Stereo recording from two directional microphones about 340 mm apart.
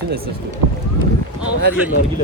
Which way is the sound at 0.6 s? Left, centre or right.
Right.